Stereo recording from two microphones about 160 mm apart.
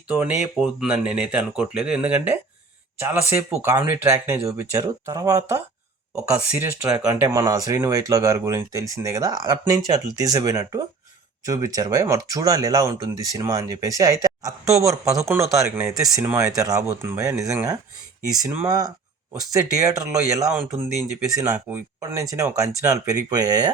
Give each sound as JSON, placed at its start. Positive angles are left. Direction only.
{"t": 0.1, "sound": "speech", "side_deg": -10}
{"t": 18.7, "sound": "speech", "side_deg": -25}
{"t": 20.5, "sound": "speech", "side_deg": -5}
{"t": 21.2, "sound": "speech", "side_deg": -20}